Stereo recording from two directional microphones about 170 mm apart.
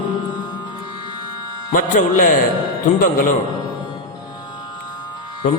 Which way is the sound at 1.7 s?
50° left (ahead or behind).